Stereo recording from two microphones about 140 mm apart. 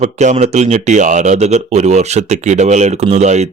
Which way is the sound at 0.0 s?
55° right (ahead or behind).